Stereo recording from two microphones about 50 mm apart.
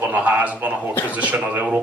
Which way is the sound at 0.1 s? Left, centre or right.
Right.